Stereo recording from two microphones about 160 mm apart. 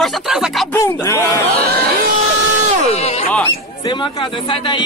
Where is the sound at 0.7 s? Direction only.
20° left (ahead or behind).